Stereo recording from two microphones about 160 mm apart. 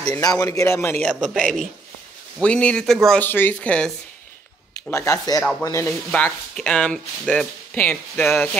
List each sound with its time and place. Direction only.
0.0 s a man's voice: 20° left (ahead or behind)
1.3 s speech: 5° left (ahead or behind)
4.9 s a man's voice: 20° left (ahead or behind)